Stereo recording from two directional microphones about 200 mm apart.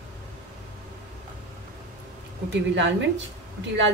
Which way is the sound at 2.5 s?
65° right (ahead or behind).